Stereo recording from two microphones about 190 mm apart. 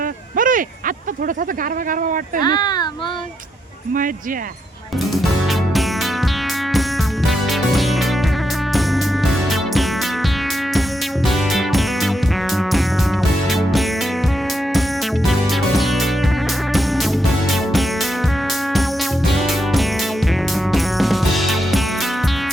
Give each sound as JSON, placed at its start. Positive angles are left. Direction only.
{"t": 0.3, "sound": "a sound", "side_deg": -45}
{"t": 2.4, "sound": "speech", "side_deg": 20}
{"t": 5.1, "sound": "music", "side_deg": 0}
{"t": 7.3, "sound": "music", "side_deg": 0}
{"t": 9.2, "sound": "music", "side_deg": 0}
{"t": 11.3, "sound": "music", "side_deg": 0}
{"t": 13.2, "sound": "music", "side_deg": 0}
{"t": 15.3, "sound": "music", "side_deg": 0}
{"t": 19.3, "sound": "music", "side_deg": 0}